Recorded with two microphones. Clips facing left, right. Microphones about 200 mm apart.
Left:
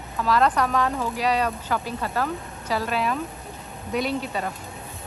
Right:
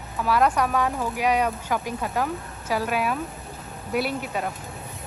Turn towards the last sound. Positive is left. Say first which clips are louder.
# left 1 dB
turn(degrees=-10)  # may be behind; listen again after turning